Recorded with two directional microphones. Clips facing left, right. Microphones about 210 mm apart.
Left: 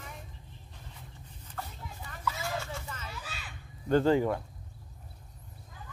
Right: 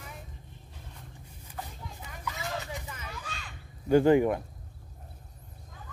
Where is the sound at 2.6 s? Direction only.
15° right (ahead or behind).